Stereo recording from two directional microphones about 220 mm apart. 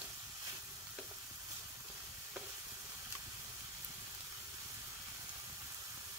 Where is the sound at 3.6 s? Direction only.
10° right (ahead or behind).